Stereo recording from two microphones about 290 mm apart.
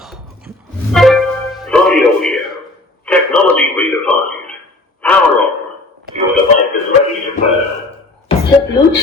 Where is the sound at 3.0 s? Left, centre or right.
Centre.